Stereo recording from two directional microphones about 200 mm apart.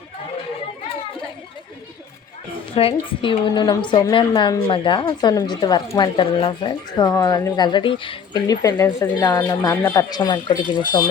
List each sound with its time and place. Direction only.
2.7 s a woman's voice: 25° left (ahead or behind)